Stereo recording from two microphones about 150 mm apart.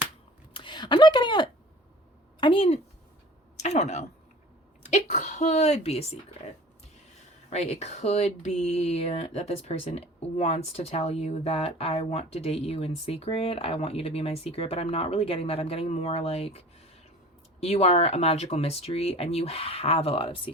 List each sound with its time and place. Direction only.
0.5 s speech: 30° left (ahead or behind)
7.5 s speech: 45° left (ahead or behind)